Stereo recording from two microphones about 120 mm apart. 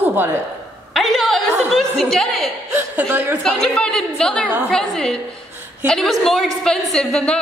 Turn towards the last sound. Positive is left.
turn(degrees=5)  # may be behind; listen again after turning